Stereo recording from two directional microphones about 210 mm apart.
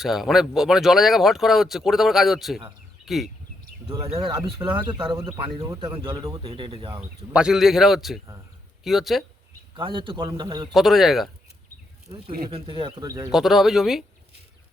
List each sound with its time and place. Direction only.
0.0 s speech: centre (ahead or behind)
3.8 s speech: 25° right (ahead or behind)
7.3 s speech: 5° right (ahead or behind)
9.7 s speech: 25° right (ahead or behind)
10.7 s speech: centre (ahead or behind)
12.0 s speech: 25° right (ahead or behind)
13.3 s speech: centre (ahead or behind)